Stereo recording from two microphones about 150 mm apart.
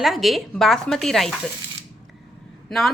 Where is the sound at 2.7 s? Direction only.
Centre (ahead or behind).